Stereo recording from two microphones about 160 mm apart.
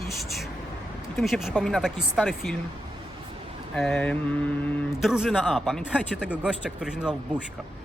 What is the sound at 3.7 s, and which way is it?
Speech, 5° left (ahead or behind).